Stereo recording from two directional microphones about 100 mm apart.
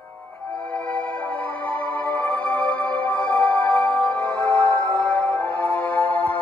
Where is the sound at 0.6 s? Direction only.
15° left (ahead or behind).